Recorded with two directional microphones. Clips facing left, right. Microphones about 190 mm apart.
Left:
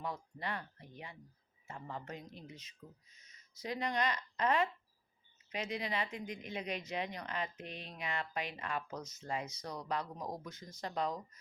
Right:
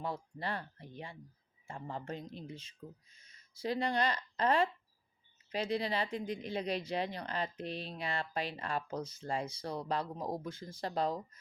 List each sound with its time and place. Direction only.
0.0 s speech: 30° right (ahead or behind)